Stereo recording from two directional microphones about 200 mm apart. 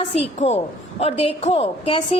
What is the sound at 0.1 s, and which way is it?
A woman's voice, 30° left (ahead or behind).